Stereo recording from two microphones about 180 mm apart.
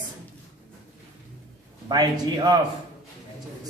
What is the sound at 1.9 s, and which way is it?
Speech, 25° right (ahead or behind).